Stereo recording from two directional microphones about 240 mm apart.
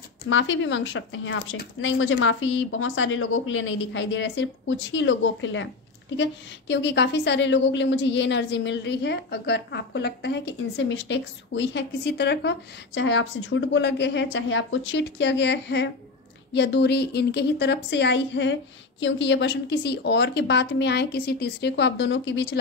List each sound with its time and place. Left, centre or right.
0.3 s speech: left